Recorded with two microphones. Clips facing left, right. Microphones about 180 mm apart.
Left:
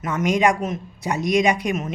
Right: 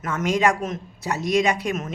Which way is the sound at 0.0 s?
10° left (ahead or behind).